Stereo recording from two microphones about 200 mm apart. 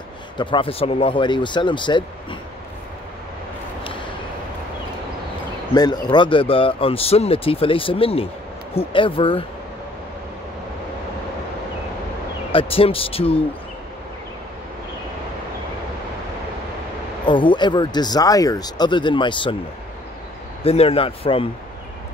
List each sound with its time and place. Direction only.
0.4 s speech: 25° left (ahead or behind)
5.8 s speech: 20° left (ahead or behind)
12.5 s speech: 30° left (ahead or behind)
17.3 s speech: 25° left (ahead or behind)
20.6 s speech: 30° left (ahead or behind)